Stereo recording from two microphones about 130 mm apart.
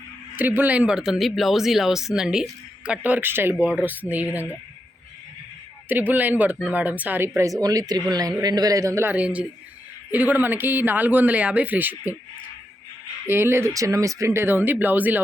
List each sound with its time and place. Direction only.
0.3 s speech: 15° right (ahead or behind)
5.9 s speech: 15° right (ahead or behind)
7.6 s speech: 30° right (ahead or behind); by 12.1 s 15° right (ahead or behind)
13.2 s speech: 20° right (ahead or behind)